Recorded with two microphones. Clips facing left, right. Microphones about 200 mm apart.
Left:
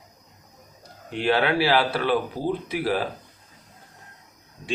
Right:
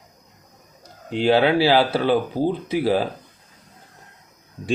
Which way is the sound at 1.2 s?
30° right (ahead or behind).